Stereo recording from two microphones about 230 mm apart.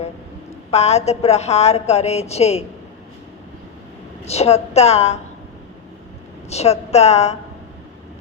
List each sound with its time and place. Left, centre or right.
0.7 s a woman's voice: left
4.3 s a woman's voice: left
6.5 s a woman's voice: left